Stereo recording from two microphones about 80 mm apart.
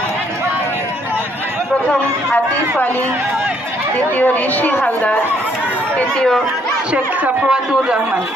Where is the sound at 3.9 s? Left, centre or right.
Left.